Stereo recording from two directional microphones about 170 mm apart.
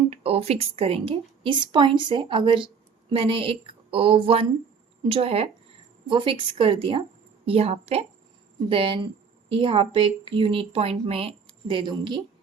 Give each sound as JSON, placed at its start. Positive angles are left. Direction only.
{"t": 0.1, "sound": "a woman's voice", "side_deg": -35}